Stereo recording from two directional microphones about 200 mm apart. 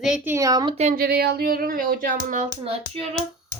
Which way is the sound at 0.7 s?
35° right (ahead or behind).